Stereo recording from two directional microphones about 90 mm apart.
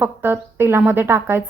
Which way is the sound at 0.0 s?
25° right (ahead or behind).